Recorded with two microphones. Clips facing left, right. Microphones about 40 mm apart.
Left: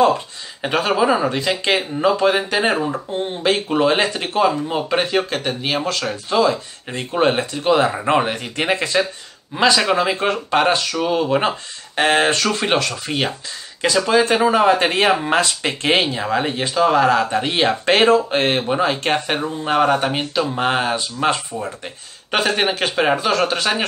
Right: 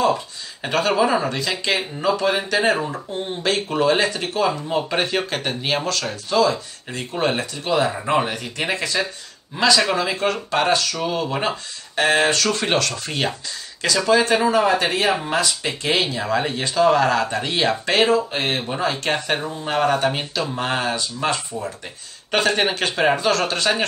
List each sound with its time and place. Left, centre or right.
0.6 s speech: centre
1.4 s speech: left
4.6 s speech: centre
5.9 s speech: centre
12.4 s speech: centre; by 16.2 s left
16.2 s speech: centre; by 18.0 s left
18.0 s speech: left
18.7 s speech: left
22.3 s speech: centre